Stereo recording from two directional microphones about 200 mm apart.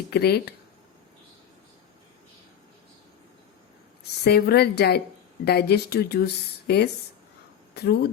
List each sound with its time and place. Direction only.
0.1 s speech: 55° left (ahead or behind)
4.2 s speech: 50° left (ahead or behind)